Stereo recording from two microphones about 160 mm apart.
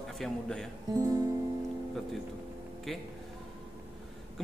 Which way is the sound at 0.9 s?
20° right (ahead or behind).